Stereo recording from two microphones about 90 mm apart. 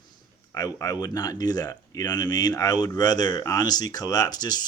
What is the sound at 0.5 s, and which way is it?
Speech, 40° left (ahead or behind).